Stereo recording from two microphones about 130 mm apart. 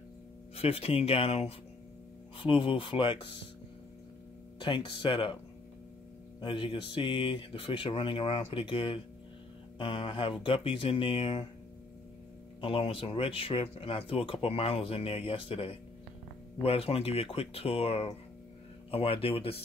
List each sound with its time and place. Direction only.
0.6 s speech: 50° left (ahead or behind)
4.6 s speech: 40° left (ahead or behind)
6.4 s speech: 40° left (ahead or behind)
12.5 s speech: 45° left (ahead or behind)